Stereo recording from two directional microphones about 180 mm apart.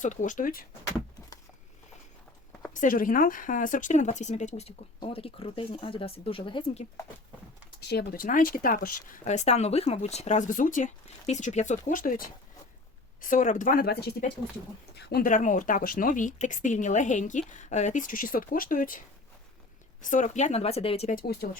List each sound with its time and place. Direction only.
0.0 s speech: 45° left (ahead or behind)
2.8 s a woman's voice: 50° left (ahead or behind); by 6.8 s 30° left (ahead or behind)
7.8 s a woman's voice: 65° left (ahead or behind); by 21.2 s 35° left (ahead or behind)